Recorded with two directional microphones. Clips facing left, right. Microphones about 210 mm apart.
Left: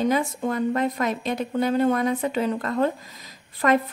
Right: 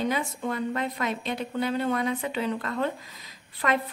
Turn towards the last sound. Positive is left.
turn(degrees=45)  # may be behind; listen again after turning